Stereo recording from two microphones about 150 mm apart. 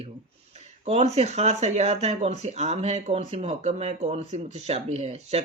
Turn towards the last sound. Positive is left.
turn(degrees=-45)  # may be behind; listen again after turning